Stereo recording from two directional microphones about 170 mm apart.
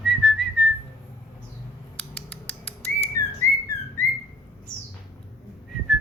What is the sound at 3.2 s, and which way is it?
Whistling, 20° left (ahead or behind).